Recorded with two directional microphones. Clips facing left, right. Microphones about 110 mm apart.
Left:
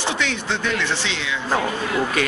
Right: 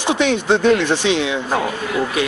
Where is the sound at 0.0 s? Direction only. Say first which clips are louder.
Right 7 dB; 20° right (ahead or behind).